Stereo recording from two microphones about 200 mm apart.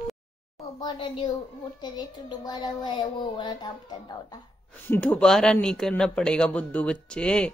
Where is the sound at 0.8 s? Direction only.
25° left (ahead or behind).